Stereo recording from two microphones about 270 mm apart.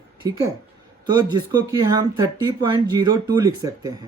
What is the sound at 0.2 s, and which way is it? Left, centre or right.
Speech, centre.